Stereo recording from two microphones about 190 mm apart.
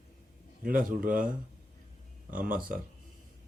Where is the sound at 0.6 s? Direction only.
45° right (ahead or behind).